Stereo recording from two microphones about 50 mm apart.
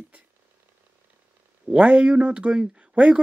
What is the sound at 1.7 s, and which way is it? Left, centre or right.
Speech, right.